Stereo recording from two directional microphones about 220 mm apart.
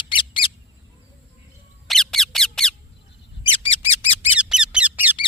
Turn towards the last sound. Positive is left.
turn(degrees=-5)  # may be behind; listen again after turning